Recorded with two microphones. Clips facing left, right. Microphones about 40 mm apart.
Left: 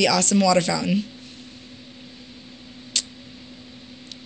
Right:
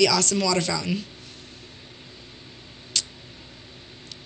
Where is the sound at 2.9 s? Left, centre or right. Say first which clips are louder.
Left 1 dB; left.